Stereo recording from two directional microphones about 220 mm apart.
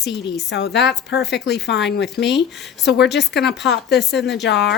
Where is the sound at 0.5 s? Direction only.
50° left (ahead or behind).